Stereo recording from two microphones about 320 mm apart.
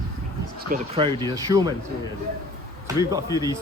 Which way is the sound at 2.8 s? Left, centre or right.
Centre.